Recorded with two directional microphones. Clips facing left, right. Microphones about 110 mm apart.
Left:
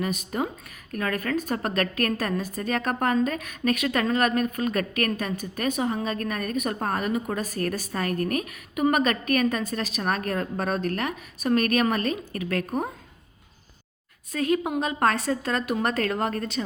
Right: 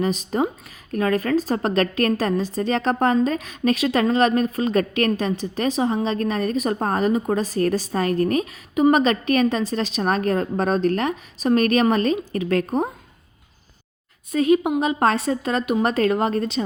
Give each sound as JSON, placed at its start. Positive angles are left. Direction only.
{"t": 0.3, "sound": "a woman's voice", "side_deg": -30}
{"t": 14.3, "sound": "a woman's voice", "side_deg": -20}